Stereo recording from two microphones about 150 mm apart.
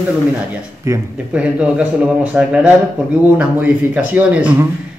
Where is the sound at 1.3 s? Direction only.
10° right (ahead or behind).